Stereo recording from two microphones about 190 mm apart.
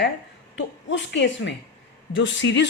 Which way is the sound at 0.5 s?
70° left (ahead or behind).